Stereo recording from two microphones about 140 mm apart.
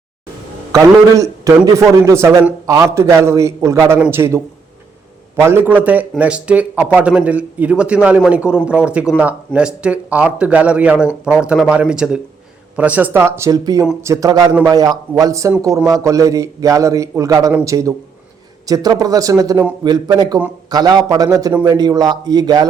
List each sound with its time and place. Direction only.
1.1 s a man's voice: 25° right (ahead or behind)
5.4 s a man's voice: 15° right (ahead or behind)